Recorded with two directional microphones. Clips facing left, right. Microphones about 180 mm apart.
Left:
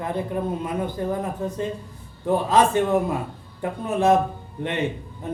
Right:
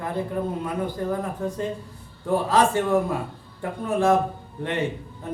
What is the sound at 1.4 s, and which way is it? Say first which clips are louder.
Speech: even; 20° left (ahead or behind).